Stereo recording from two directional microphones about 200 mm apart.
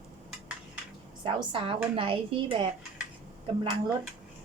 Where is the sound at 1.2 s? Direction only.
25° right (ahead or behind).